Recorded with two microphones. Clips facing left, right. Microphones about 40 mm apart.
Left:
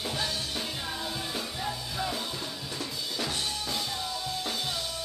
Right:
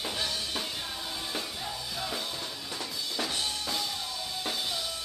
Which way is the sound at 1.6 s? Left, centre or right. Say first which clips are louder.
Left 3 dB; centre.